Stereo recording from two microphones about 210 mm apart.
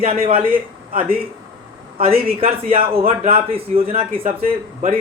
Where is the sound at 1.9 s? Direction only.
25° right (ahead or behind).